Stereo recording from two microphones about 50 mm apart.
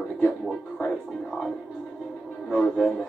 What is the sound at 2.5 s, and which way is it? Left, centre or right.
Speech, centre.